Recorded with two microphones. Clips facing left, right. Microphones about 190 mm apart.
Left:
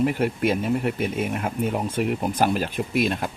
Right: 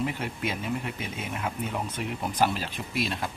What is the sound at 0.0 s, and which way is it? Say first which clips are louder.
Speech: left 9 dB; 50° left (ahead or behind).